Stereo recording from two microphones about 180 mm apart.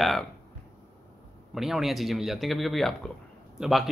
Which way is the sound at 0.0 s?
Centre (ahead or behind).